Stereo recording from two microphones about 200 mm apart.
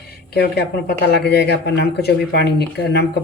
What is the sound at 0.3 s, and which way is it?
Speech, 55° left (ahead or behind).